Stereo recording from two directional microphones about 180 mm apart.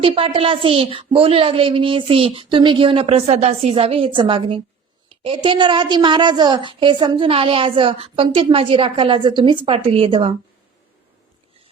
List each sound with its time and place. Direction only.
0.0 s a woman's voice: 30° right (ahead or behind)